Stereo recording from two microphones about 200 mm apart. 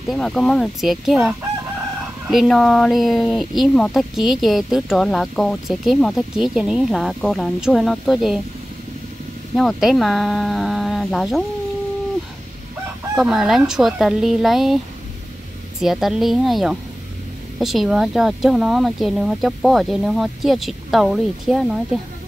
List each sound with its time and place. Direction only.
0.0 s speech: centre (ahead or behind)
9.6 s speech: centre (ahead or behind)
13.1 s speech: 5° right (ahead or behind)
15.8 s speech: centre (ahead or behind)